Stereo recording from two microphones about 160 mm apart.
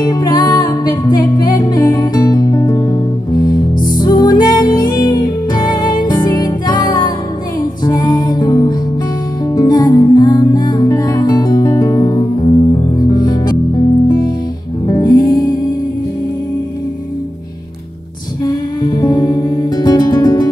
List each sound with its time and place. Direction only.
0.0 s music: 25° left (ahead or behind)
14.9 s music: 25° left (ahead or behind)
18.4 s music: 25° left (ahead or behind)